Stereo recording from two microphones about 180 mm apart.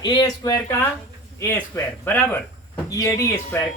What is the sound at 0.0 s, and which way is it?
Speech, 25° left (ahead or behind).